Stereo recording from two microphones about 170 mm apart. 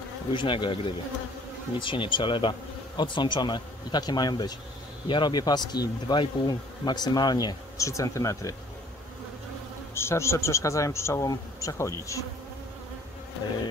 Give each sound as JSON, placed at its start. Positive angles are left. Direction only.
{"t": 0.3, "sound": "speech", "side_deg": 25}
{"t": 9.9, "sound": "a man's voice", "side_deg": 15}